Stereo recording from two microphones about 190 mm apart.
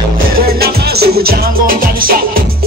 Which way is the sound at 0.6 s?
55° right (ahead or behind).